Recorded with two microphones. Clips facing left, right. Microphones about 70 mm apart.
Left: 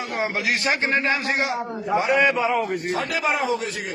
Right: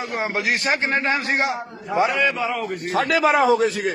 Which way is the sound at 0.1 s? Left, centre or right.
Right.